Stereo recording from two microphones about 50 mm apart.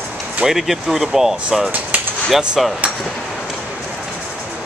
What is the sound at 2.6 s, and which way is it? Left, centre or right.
Speech, centre.